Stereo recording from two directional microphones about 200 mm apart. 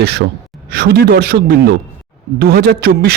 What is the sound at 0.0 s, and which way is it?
A man's voice, 55° right (ahead or behind).